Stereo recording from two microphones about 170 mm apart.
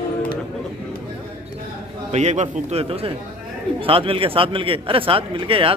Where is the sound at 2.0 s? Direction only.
40° right (ahead or behind).